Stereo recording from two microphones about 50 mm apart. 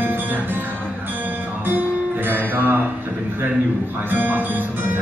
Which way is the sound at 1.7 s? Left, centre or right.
Right.